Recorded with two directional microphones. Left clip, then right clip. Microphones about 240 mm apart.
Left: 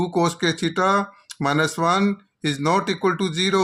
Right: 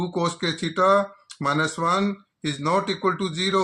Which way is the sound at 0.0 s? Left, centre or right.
Left.